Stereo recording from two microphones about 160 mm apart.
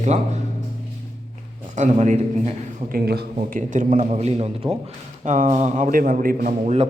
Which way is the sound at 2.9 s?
70° right (ahead or behind).